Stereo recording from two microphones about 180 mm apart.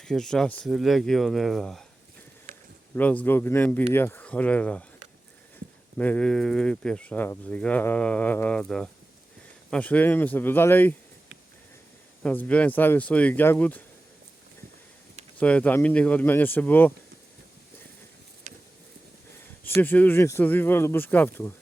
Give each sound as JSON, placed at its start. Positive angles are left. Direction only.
{"t": 0.0, "sound": "speech", "side_deg": 5}
{"t": 2.5, "sound": "a sound", "side_deg": -45}
{"t": 2.9, "sound": "speech", "side_deg": 10}
{"t": 6.0, "sound": "speech", "side_deg": 5}
{"t": 12.2, "sound": "speech", "side_deg": 10}
{"t": 15.4, "sound": "speech", "side_deg": 5}
{"t": 19.6, "sound": "speech", "side_deg": 10}